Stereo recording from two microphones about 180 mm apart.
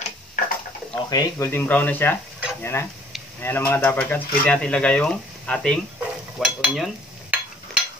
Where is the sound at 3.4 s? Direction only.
10° left (ahead or behind).